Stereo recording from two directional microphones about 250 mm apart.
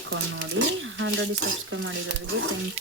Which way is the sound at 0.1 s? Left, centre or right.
Right.